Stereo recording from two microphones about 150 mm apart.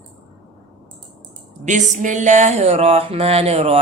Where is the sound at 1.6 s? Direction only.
55° right (ahead or behind).